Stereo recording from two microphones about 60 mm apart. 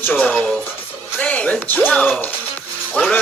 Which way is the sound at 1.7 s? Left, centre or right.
Left.